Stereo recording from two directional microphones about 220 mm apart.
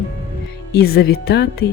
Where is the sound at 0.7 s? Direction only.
45° left (ahead or behind).